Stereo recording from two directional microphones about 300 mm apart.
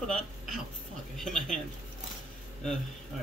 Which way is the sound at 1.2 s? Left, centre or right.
Centre.